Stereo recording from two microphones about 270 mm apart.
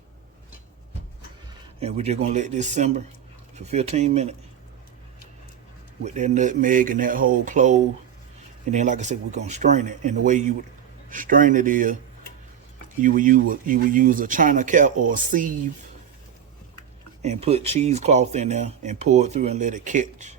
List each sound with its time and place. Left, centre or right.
1.8 s speech: right
6.1 s speech: right
13.0 s speech: right
17.2 s speech: right